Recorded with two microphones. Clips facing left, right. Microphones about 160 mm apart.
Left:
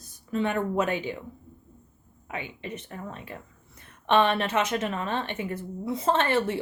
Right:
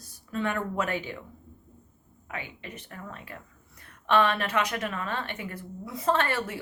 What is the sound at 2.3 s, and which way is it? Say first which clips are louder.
Speech: left 4 dB; 20° left (ahead or behind).